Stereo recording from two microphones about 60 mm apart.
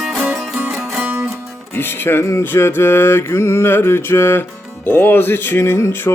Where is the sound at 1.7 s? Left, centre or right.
Left.